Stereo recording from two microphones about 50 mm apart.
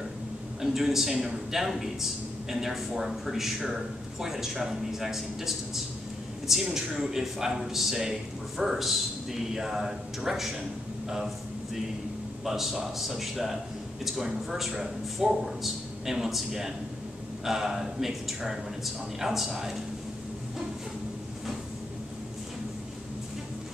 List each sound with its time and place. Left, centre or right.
0.6 s a man's voice: centre
12.4 s speech: centre